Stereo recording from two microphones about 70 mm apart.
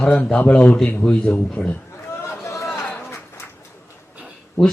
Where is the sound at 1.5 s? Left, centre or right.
Left.